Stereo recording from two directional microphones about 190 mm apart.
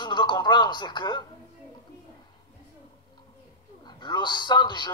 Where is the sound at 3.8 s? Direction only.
25° left (ahead or behind).